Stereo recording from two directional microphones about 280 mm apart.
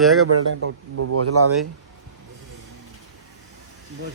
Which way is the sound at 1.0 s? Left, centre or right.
Right.